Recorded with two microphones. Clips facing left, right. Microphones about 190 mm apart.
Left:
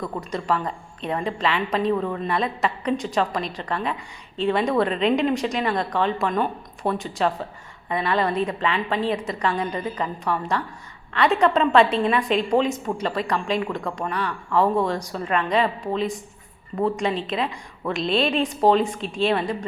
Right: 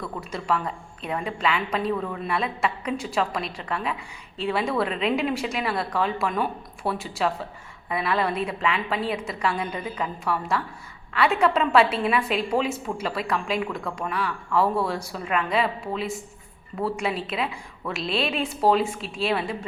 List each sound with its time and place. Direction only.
0.0 s speech: 15° left (ahead or behind)
0.3 s a woman's voice: centre (ahead or behind)